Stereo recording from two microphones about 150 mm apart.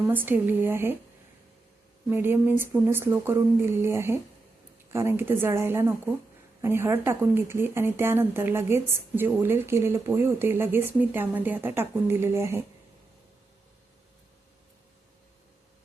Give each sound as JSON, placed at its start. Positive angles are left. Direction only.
{"t": 0.1, "sound": "speech", "side_deg": -10}
{"t": 2.0, "sound": "speech", "side_deg": -15}